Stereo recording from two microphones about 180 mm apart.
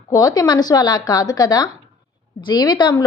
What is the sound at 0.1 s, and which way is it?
A woman's voice, 20° left (ahead or behind).